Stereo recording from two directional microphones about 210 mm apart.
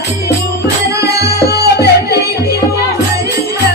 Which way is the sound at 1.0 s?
50° left (ahead or behind).